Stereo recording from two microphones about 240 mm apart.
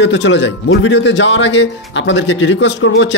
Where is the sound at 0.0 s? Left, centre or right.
Left.